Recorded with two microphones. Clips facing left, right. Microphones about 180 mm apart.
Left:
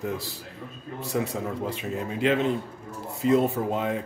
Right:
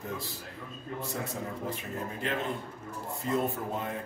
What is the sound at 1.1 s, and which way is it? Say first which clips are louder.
A man's voice: left 12 dB; 85° left.